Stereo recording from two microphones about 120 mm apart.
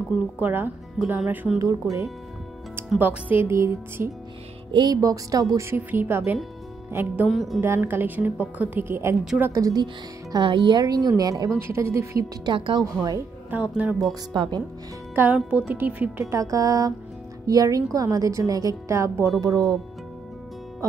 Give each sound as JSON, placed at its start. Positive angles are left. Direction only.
{"t": 0.4, "sound": "a woman's voice", "side_deg": -15}
{"t": 1.6, "sound": "a woman's voice", "side_deg": -25}
{"t": 3.0, "sound": "a woman's voice", "side_deg": -15}
{"t": 4.7, "sound": "a woman's voice", "side_deg": -35}
{"t": 7.2, "sound": "speech", "side_deg": 0}
{"t": 7.6, "sound": "a woman's voice", "side_deg": -20}
{"t": 9.5, "sound": "a woman's voice", "side_deg": -30}
{"t": 10.3, "sound": "a woman's voice", "side_deg": -40}
{"t": 12.4, "sound": "a woman's voice", "side_deg": -40}
{"t": 13.5, "sound": "a woman's voice", "side_deg": -10}
{"t": 14.3, "sound": "a woman's voice", "side_deg": -40}
{"t": 15.1, "sound": "a woman's voice", "side_deg": -15}
{"t": 16.3, "sound": "a woman's voice", "side_deg": -30}